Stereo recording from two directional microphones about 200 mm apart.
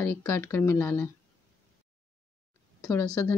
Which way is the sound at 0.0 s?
10° left (ahead or behind).